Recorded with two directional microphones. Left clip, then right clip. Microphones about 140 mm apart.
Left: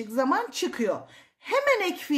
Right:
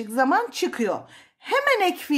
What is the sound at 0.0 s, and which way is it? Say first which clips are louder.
A woman's voice: right 4 dB; 35° right (ahead or behind).